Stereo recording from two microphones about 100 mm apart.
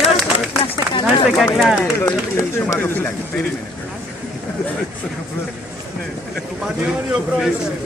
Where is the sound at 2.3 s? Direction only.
25° left (ahead or behind).